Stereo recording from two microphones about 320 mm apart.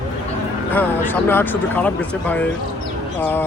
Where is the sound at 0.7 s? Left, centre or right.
Centre.